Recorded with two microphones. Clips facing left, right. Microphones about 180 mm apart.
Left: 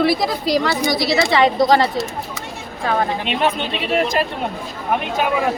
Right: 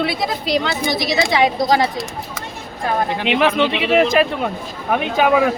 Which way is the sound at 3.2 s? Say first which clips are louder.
Right 4 dB; 90° right.